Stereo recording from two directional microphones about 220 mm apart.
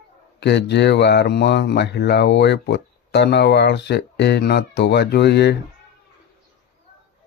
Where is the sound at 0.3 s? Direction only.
50° left (ahead or behind).